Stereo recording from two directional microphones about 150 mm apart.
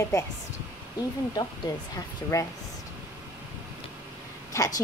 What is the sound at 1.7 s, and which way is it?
Speech, 25° left (ahead or behind).